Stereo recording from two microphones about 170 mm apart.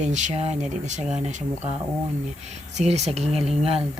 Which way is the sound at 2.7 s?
40° right (ahead or behind).